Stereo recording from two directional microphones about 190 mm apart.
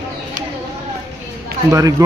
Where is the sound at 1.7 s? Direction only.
15° right (ahead or behind).